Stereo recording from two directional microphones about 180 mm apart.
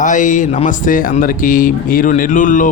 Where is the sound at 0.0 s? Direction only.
45° left (ahead or behind).